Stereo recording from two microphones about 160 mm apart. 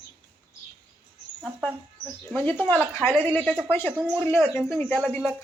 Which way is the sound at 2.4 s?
10° left (ahead or behind).